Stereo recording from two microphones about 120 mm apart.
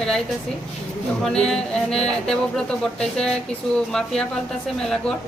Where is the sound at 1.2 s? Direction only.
5° left (ahead or behind).